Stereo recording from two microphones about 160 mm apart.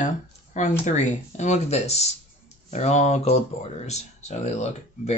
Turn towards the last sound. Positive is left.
turn(degrees=45)  # may be behind; listen again after turning